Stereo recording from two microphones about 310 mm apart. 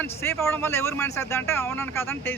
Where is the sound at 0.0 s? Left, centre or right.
Centre.